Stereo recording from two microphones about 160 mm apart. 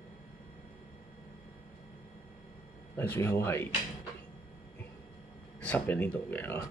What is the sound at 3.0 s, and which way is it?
Speech, 15° left (ahead or behind).